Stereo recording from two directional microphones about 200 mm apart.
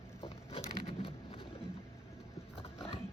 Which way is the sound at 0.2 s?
30° left (ahead or behind).